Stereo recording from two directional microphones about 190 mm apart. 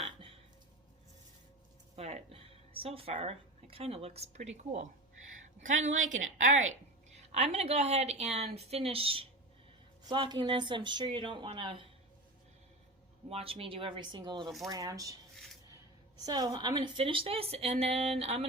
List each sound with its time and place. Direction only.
0.0 s a sound: 30° right (ahead or behind)
2.0 s a woman's voice: 35° right (ahead or behind)
7.1 s a woman's voice: 35° right (ahead or behind)
13.3 s speech: 30° right (ahead or behind)
16.2 s a woman's voice: 20° right (ahead or behind)